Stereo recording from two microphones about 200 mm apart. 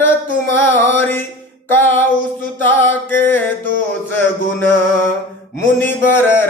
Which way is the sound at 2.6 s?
10° left (ahead or behind).